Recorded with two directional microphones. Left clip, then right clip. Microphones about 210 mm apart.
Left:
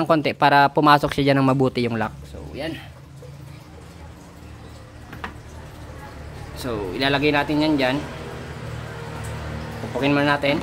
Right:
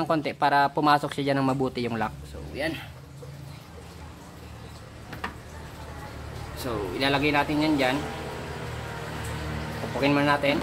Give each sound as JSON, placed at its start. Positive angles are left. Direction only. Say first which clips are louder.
{"t": 0.0, "sound": "speech", "louder": "left 7 dB", "side_deg": 25}
{"t": 6.6, "sound": "speech", "louder": "left 4 dB", "side_deg": 40}
{"t": 10.0, "sound": "speech", "louder": "left 3 dB", "side_deg": 40}